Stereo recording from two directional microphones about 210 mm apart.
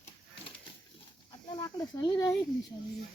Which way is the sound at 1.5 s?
15° left (ahead or behind).